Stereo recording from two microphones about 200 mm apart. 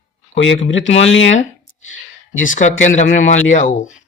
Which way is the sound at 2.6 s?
35° left (ahead or behind).